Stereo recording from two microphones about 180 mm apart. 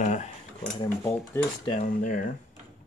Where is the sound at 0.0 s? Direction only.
40° left (ahead or behind).